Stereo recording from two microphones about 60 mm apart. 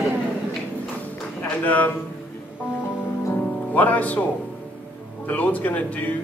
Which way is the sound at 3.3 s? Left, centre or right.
Left.